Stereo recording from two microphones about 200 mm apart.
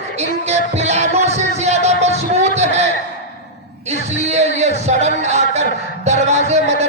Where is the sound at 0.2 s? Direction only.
35° right (ahead or behind).